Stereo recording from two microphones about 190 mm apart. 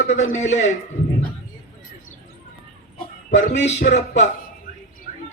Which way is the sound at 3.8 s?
55° left (ahead or behind).